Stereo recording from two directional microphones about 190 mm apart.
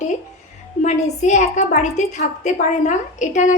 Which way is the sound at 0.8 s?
40° left (ahead or behind).